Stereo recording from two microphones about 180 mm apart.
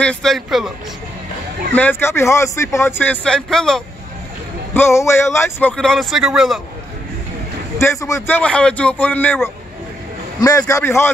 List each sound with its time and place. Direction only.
0.0 s speech: 5° left (ahead or behind)
1.7 s speech: 10° left (ahead or behind)
4.7 s speech: 15° left (ahead or behind); by 6.6 s centre (ahead or behind)
7.8 s speech: 15° left (ahead or behind)